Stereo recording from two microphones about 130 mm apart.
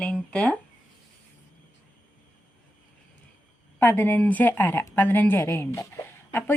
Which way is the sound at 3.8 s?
15° left (ahead or behind).